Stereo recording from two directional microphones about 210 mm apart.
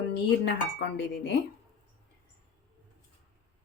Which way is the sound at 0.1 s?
55° left (ahead or behind).